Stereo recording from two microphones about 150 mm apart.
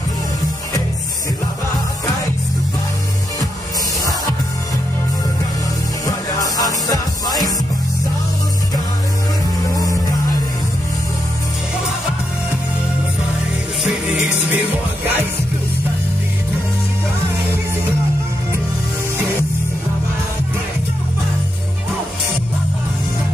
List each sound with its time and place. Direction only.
6.0 s music: 25° left (ahead or behind)